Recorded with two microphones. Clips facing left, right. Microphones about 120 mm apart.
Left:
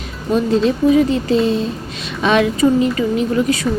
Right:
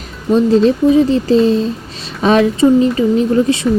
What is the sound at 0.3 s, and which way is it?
A woman's voice, 35° right (ahead or behind).